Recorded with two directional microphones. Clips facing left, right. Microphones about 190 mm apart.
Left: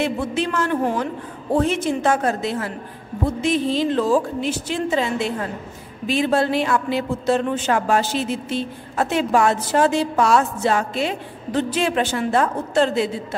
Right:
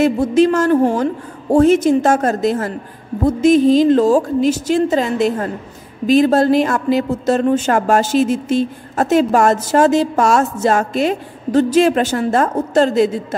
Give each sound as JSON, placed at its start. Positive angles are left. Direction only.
{"t": 0.0, "sound": "a man's voice", "side_deg": -40}